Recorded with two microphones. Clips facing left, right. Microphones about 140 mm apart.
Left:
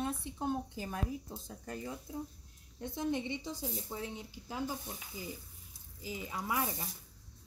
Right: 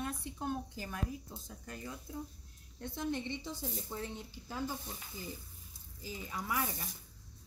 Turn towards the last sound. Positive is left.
turn(degrees=20)  # may be behind; listen again after turning